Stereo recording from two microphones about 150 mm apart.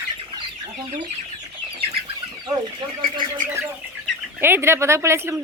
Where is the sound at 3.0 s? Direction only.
30° right (ahead or behind).